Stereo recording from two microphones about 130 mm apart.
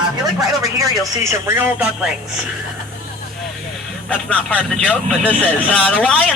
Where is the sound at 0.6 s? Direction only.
25° right (ahead or behind).